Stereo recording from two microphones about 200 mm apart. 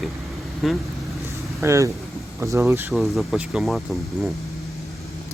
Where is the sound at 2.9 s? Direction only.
Centre (ahead or behind).